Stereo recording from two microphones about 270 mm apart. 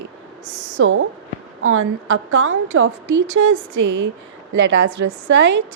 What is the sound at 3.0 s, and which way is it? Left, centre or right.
Speech, right.